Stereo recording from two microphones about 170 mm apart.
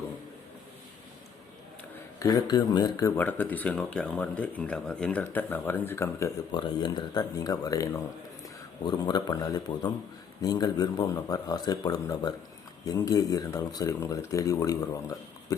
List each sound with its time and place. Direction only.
2.1 s speech: 20° left (ahead or behind)
3.2 s speech: 10° left (ahead or behind)
6.5 s speech: 30° left (ahead or behind)